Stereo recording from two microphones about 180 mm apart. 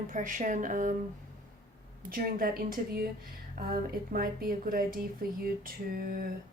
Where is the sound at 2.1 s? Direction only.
50° right (ahead or behind).